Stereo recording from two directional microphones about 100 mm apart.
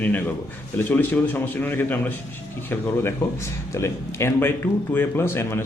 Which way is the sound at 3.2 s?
25° left (ahead or behind).